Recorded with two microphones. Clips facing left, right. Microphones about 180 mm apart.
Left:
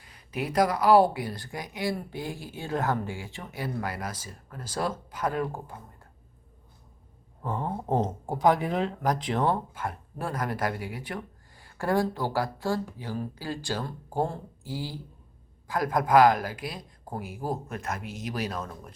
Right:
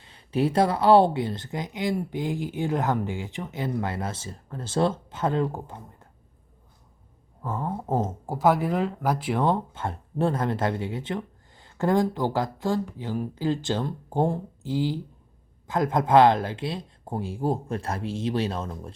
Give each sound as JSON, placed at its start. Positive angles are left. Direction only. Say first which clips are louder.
{"t": 0.0, "sound": "speech", "louder": "right 8 dB", "side_deg": -30}
{"t": 7.9, "sound": "speech", "louder": "even", "side_deg": 20}
{"t": 8.3, "sound": "speech", "louder": "right 2 dB", "side_deg": -5}